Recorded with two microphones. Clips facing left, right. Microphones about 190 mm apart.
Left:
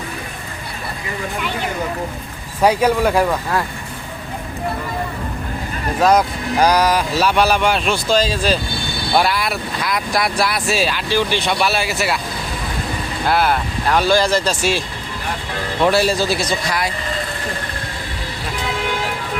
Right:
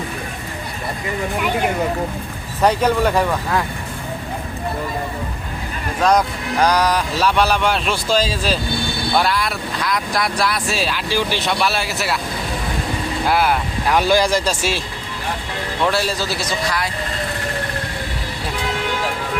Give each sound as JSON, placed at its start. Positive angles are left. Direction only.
{"t": 2.6, "sound": "a man's voice", "side_deg": 10}
{"t": 6.0, "sound": "speech", "side_deg": 5}
{"t": 9.1, "sound": "speech", "side_deg": 5}
{"t": 13.2, "sound": "speech", "side_deg": -10}
{"t": 15.8, "sound": "a man's voice", "side_deg": 15}